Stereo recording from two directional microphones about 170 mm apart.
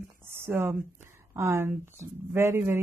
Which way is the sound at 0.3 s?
15° right (ahead or behind).